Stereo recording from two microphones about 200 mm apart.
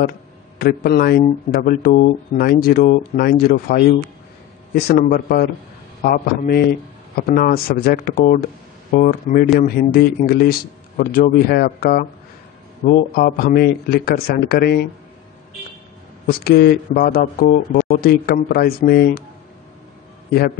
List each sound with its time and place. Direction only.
0.6 s speech: 50° left (ahead or behind)
16.3 s speech: 50° left (ahead or behind)